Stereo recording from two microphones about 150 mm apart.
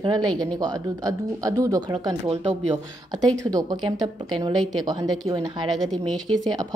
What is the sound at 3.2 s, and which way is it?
A woman's voice, 25° right (ahead or behind).